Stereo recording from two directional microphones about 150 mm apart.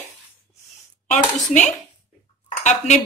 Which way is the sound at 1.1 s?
55° left (ahead or behind).